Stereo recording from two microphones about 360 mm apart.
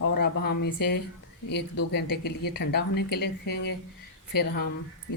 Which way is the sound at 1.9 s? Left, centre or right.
Left.